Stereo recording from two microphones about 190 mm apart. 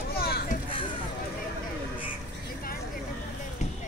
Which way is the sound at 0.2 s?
55° left (ahead or behind).